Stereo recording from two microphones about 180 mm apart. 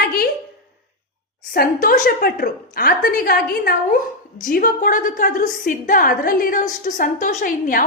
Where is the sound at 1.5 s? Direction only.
50° left (ahead or behind).